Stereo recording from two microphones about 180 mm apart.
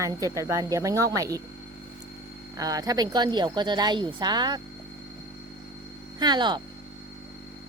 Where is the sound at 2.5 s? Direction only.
20° right (ahead or behind).